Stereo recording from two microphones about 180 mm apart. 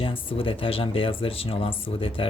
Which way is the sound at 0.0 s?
30° left (ahead or behind).